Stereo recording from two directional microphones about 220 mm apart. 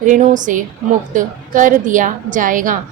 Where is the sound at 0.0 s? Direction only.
35° right (ahead or behind).